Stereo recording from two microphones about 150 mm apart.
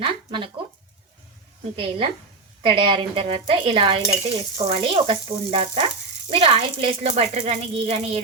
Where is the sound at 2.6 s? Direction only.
35° right (ahead or behind).